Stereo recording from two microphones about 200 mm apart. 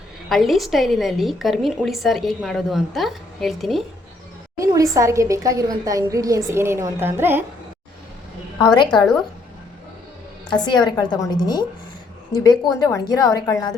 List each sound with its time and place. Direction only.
0.3 s a woman's voice: centre (ahead or behind)
4.5 s a woman's voice: 15° right (ahead or behind)
8.6 s a woman's voice: 20° left (ahead or behind)
10.6 s a woman's voice: 20° left (ahead or behind)